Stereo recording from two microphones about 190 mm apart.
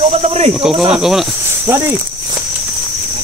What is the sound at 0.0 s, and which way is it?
Snake, 35° right (ahead or behind).